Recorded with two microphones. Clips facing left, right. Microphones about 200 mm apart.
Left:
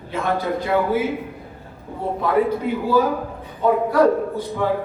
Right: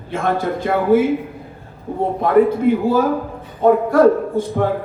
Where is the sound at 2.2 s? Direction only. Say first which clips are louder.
Right 6 dB; 50° right (ahead or behind).